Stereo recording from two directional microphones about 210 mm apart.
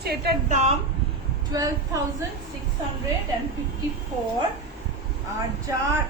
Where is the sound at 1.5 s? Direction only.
15° right (ahead or behind).